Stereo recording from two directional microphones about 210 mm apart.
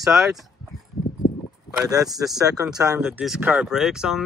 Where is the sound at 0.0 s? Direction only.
Centre (ahead or behind).